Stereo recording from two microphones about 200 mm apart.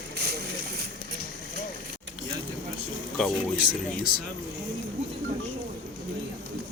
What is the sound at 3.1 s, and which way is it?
Speech, centre (ahead or behind).